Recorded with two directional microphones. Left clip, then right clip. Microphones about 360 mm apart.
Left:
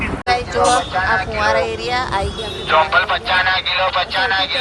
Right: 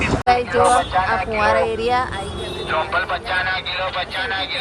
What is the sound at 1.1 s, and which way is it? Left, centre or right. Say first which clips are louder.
Speech: left 4 dB; centre.